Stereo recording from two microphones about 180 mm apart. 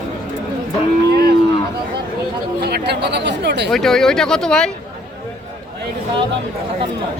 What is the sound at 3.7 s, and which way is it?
Speech, centre (ahead or behind).